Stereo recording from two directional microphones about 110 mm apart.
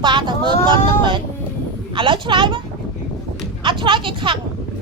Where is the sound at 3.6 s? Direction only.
50° right (ahead or behind).